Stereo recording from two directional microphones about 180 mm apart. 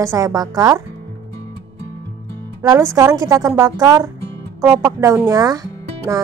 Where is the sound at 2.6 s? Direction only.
20° right (ahead or behind).